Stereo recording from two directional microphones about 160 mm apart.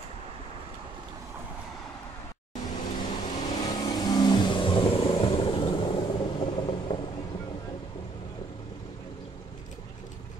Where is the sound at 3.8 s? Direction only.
25° left (ahead or behind).